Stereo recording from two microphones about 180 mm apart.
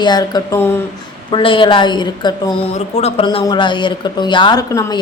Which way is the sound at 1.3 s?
30° left (ahead or behind).